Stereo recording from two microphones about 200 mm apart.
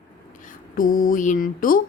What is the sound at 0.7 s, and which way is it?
Mantra, 45° left (ahead or behind).